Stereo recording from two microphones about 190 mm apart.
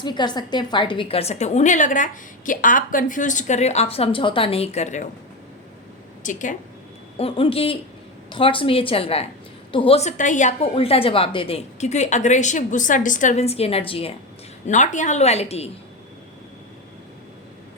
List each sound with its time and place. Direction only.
0.0 s a woman's voice: 25° left (ahead or behind)
6.2 s a woman's voice: 40° left (ahead or behind)
7.2 s a woman's voice: 30° left (ahead or behind)
14.7 s a woman's voice: 40° left (ahead or behind)